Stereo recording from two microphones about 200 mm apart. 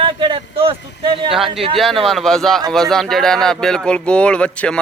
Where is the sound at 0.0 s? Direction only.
25° right (ahead or behind).